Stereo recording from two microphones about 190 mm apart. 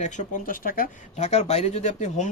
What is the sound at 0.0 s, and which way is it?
Speech, 40° left (ahead or behind).